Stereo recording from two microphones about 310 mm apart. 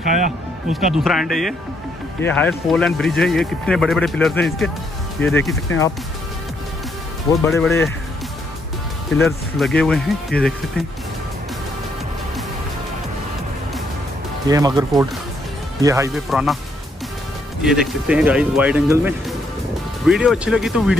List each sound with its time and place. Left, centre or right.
0.0 s speech: right
0.7 s speech: centre
7.4 s speech: centre
9.2 s speech: centre
14.5 s speech: centre
17.6 s speech: centre